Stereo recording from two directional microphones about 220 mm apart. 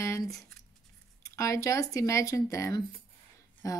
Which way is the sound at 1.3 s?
15° left (ahead or behind).